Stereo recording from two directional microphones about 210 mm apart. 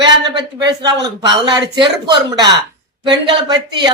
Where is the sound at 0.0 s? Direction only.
20° right (ahead or behind).